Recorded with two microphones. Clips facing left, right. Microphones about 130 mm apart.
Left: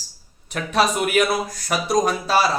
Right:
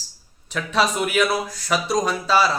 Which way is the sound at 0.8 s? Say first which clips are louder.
Left 1 dB; 50° left (ahead or behind).